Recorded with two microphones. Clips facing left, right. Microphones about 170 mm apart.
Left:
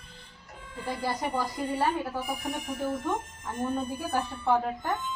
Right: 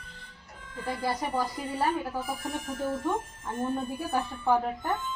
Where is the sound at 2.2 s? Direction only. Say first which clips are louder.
Left 1 dB; 15° left (ahead or behind).